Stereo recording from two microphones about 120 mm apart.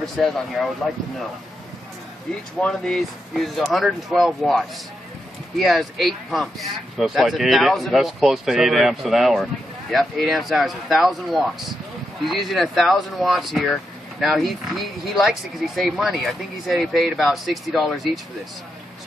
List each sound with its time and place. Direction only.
0.0 s speech: centre (ahead or behind)
2.6 s speech: 5° left (ahead or behind)